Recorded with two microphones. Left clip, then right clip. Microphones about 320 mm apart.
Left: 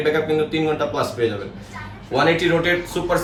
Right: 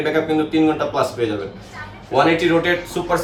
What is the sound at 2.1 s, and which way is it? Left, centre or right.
A man's voice, centre.